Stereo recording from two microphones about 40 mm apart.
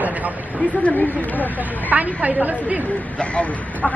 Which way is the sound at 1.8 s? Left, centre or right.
Right.